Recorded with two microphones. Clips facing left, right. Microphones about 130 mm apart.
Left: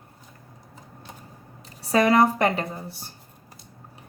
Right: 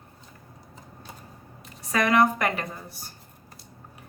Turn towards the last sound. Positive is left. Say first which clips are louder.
# left 4 dB
turn(degrees=30)  # may be behind; listen again after turning